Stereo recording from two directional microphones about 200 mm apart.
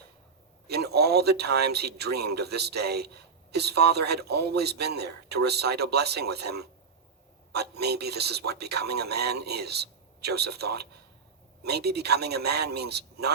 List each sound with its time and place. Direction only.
0.7 s a man's voice: 55° right (ahead or behind)